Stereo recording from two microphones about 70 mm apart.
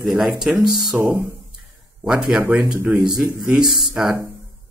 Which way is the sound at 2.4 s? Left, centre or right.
Right.